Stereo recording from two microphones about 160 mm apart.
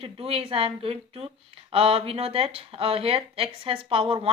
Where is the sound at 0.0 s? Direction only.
35° right (ahead or behind).